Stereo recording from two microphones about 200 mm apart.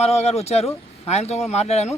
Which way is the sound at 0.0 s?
30° left (ahead or behind).